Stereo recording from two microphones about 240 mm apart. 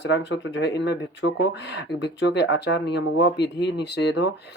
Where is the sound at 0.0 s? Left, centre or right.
Left.